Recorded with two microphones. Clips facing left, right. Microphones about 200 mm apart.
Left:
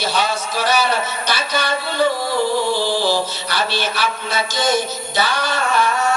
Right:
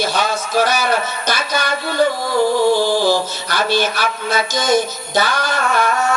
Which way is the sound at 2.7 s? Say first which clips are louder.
Right 3 dB; 45° right (ahead or behind).